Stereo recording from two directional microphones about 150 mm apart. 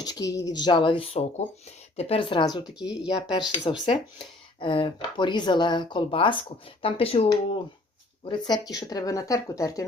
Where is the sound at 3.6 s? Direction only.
30° left (ahead or behind).